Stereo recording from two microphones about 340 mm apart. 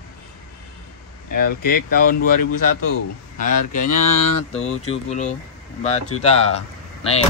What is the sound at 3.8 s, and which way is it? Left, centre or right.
Speech, left.